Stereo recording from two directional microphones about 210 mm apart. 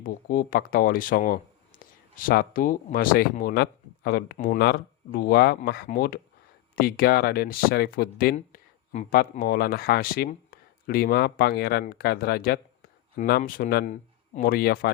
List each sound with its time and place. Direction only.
0.0 s speech: 40° left (ahead or behind)